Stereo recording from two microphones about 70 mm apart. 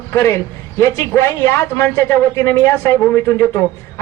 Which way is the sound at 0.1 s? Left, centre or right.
Left.